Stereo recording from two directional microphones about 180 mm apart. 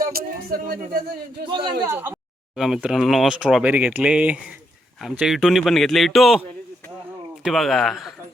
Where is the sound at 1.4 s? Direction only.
25° right (ahead or behind).